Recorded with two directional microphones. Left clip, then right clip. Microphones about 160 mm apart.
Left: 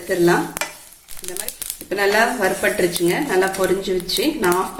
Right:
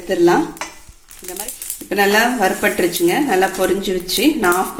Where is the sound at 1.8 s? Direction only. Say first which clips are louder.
Right 2 dB; 55° right (ahead or behind).